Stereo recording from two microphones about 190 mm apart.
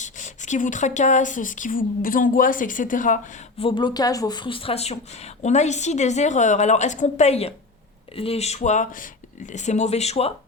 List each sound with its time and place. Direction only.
0.0 s speech: 40° left (ahead or behind)
3.6 s speech: 25° left (ahead or behind)